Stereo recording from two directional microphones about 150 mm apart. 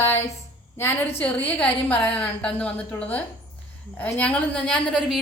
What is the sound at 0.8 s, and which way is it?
A woman's voice, 15° left (ahead or behind).